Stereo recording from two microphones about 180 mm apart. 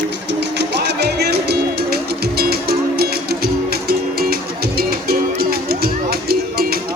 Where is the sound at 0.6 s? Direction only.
70° right (ahead or behind).